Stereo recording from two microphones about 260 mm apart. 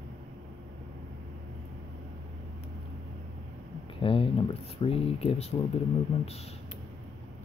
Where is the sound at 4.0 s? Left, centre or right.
Left.